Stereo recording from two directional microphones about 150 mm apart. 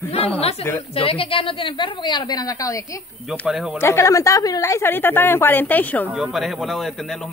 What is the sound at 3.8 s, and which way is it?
A woman's voice, 20° left (ahead or behind).